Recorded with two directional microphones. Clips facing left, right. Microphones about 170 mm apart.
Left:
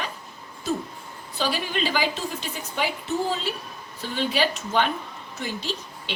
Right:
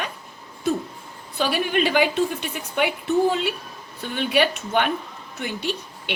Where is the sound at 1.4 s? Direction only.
60° right (ahead or behind).